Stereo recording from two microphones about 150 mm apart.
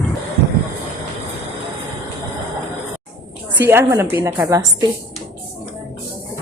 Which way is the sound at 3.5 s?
15° right (ahead or behind).